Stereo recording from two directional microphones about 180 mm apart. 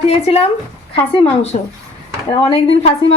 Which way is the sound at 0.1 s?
35° left (ahead or behind).